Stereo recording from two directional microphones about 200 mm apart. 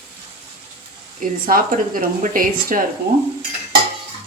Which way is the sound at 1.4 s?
45° right (ahead or behind).